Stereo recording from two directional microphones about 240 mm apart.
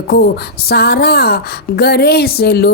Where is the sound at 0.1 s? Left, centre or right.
Left.